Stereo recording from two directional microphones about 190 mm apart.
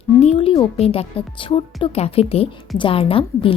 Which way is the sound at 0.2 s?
30° left (ahead or behind).